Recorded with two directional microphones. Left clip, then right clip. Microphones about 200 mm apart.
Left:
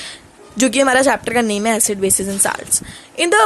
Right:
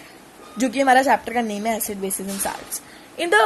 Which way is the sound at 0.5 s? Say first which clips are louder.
Left 3 dB; 35° left (ahead or behind).